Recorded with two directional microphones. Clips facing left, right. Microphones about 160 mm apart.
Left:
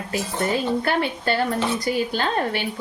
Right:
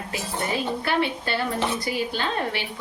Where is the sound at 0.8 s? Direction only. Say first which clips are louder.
Left 2 dB; 45° left (ahead or behind).